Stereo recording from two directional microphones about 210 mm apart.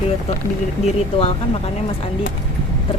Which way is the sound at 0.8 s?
25° left (ahead or behind).